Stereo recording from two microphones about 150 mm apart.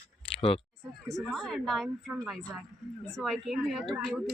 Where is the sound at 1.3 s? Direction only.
5° left (ahead or behind).